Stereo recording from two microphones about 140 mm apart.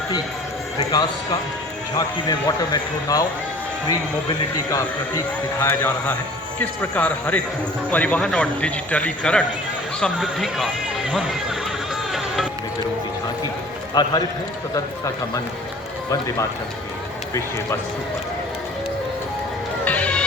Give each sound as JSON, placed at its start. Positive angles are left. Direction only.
{"t": 0.8, "sound": "speech", "side_deg": 30}
{"t": 4.5, "sound": "speech", "side_deg": 30}
{"t": 5.5, "sound": "a man's voice", "side_deg": 15}
{"t": 13.9, "sound": "speech", "side_deg": 30}
{"t": 19.8, "sound": "music", "side_deg": 10}